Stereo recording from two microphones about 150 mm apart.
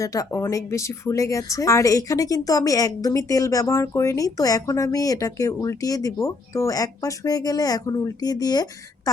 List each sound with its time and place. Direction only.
0.0 s a woman's voice: 20° left (ahead or behind)